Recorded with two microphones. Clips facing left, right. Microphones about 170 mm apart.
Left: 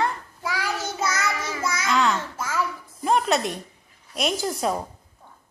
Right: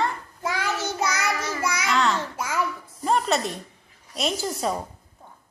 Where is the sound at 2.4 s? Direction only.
20° right (ahead or behind).